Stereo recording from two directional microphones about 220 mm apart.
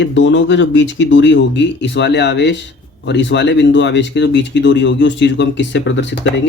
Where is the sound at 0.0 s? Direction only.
55° left (ahead or behind).